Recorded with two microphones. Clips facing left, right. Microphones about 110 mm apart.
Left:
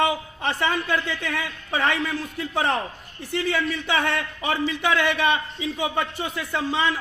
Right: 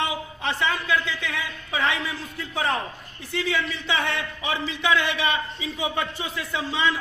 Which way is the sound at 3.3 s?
55° left (ahead or behind).